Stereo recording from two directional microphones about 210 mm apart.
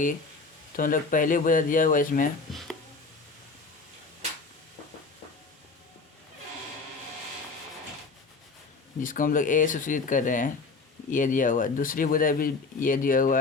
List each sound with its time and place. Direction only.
0.8 s speech: 40° left (ahead or behind)
2.5 s a sound: centre (ahead or behind)
9.0 s speech: 40° left (ahead or behind)